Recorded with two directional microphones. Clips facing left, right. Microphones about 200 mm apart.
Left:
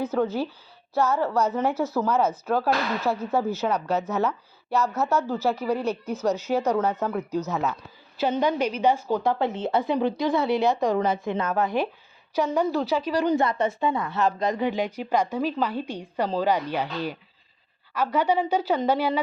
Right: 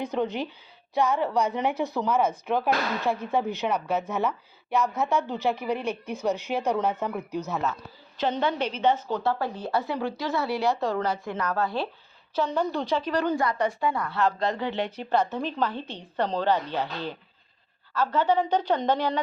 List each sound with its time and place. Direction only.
0.0 s a woman's voice: 5° left (ahead or behind)
0.9 s speech: 15° right (ahead or behind)
8.2 s speech: 10° left (ahead or behind)
9.4 s a woman's voice: 20° left (ahead or behind)
13.3 s speech: 25° left (ahead or behind); by 19.2 s 10° left (ahead or behind)